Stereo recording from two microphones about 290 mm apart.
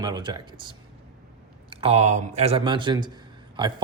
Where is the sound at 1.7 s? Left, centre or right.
Centre.